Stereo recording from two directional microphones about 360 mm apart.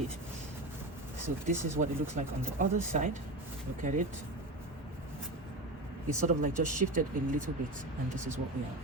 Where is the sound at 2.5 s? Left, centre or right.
Centre.